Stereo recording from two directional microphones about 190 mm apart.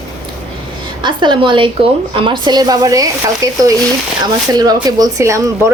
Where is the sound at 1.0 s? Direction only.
25° right (ahead or behind).